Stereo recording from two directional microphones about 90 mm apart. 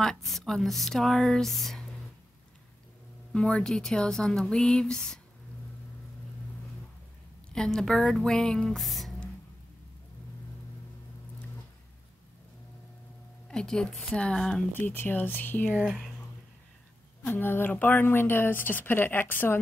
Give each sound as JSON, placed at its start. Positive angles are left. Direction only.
{"t": 0.0, "sound": "speech", "side_deg": 5}
{"t": 3.3, "sound": "speech", "side_deg": 10}
{"t": 7.5, "sound": "speech", "side_deg": 5}
{"t": 13.5, "sound": "a woman's voice", "side_deg": 5}
{"t": 14.7, "sound": "speech", "side_deg": 20}
{"t": 15.7, "sound": "speech", "side_deg": -5}
{"t": 17.2, "sound": "speech", "side_deg": 25}